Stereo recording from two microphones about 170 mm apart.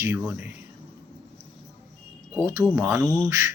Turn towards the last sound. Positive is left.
turn(degrees=5)  # may be behind; listen again after turning